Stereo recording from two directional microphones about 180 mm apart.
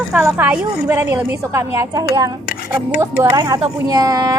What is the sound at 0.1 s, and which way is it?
A woman's voice, 10° right (ahead or behind).